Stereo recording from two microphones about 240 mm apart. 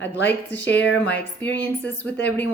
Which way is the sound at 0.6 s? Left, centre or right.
Left.